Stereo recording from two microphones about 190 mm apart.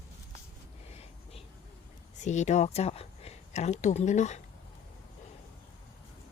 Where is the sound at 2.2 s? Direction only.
40° left (ahead or behind).